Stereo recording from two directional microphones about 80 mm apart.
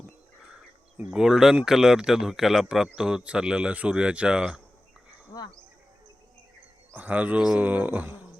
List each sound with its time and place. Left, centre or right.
0.9 s speech: centre
6.9 s speech: centre